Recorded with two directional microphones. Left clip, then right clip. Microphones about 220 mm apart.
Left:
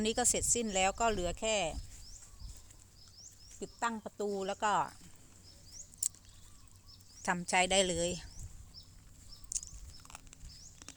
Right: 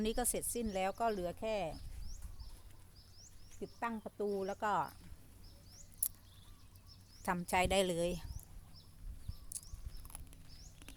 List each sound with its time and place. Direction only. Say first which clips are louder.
0.0 s speech: left 5 dB; 10° left (ahead or behind)
3.2 s speech: left 2 dB; 10° left (ahead or behind)
5.7 s a sound: left 8 dB; 5° left (ahead or behind)
7.2 s speech: left 3 dB; centre (ahead or behind)
9.6 s bird: left 12 dB; 5° left (ahead or behind)
10.6 s patter: left 5 dB; 5° left (ahead or behind)